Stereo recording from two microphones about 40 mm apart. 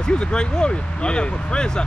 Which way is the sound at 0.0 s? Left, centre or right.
Left.